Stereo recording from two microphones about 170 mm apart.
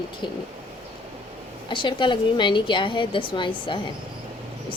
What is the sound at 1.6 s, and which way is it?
A woman's voice, 30° left (ahead or behind).